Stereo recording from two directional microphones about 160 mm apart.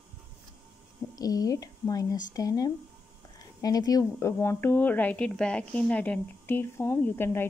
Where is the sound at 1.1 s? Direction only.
25° left (ahead or behind).